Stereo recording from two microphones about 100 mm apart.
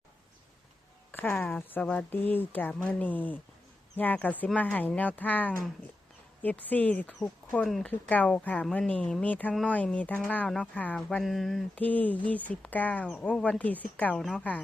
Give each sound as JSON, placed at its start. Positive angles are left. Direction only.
{"t": 1.1, "sound": "speech", "side_deg": 20}
{"t": 11.2, "sound": "speech", "side_deg": 0}
{"t": 11.7, "sound": "speech", "side_deg": 15}